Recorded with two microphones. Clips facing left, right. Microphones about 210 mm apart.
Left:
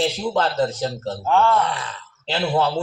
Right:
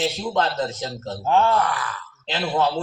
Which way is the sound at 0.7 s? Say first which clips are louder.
Left 5 dB; 30° left (ahead or behind).